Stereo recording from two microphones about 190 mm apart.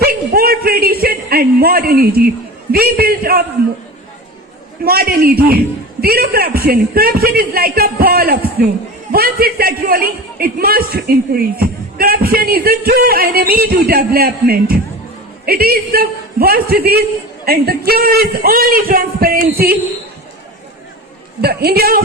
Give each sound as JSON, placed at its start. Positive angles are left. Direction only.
{"t": 0.0, "sound": "a sound", "side_deg": -55}
{"t": 2.7, "sound": "speech", "side_deg": -55}
{"t": 4.8, "sound": "speech", "side_deg": -55}
{"t": 21.4, "sound": "a woman's voice", "side_deg": -55}